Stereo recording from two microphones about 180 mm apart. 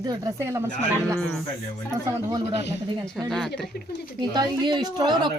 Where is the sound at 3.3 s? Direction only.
Centre (ahead or behind).